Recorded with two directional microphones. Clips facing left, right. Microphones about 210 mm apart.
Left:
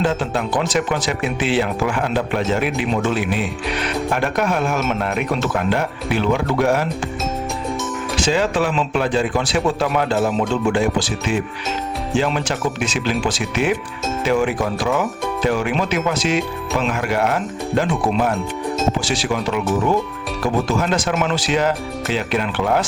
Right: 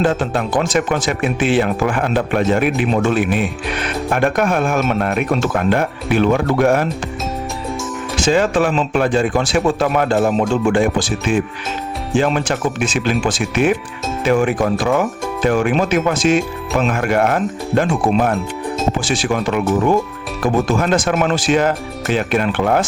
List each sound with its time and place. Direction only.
0.0 s speech: 50° right (ahead or behind)
8.2 s speech: 50° right (ahead or behind)
18.9 s speech: 50° right (ahead or behind)